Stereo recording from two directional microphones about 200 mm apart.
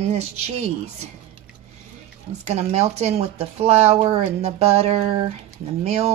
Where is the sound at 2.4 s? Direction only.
35° right (ahead or behind).